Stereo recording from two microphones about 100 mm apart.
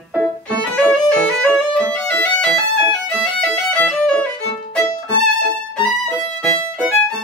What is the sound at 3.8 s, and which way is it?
Violin, 10° left (ahead or behind).